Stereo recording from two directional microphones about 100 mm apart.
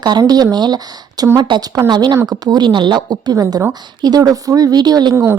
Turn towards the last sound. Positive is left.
turn(degrees=-45)  # may be behind; listen again after turning